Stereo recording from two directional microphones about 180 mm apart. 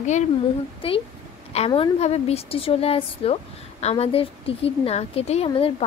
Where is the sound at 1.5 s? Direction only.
35° left (ahead or behind).